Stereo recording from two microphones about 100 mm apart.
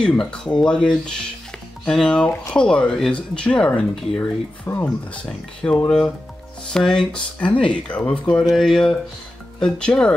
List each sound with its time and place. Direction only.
0.0 s speech: 10° left (ahead or behind)
4.7 s speech: 30° left (ahead or behind)
5.1 s speech: 10° left (ahead or behind)